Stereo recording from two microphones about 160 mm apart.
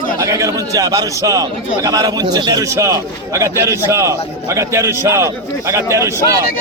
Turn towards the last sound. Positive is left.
turn(degrees=-20)  # may be behind; listen again after turning